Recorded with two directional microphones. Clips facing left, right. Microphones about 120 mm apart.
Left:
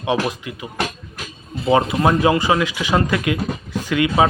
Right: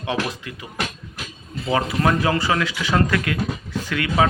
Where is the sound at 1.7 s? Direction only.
25° left (ahead or behind).